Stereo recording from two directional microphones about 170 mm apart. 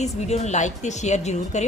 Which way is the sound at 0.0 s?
40° left (ahead or behind).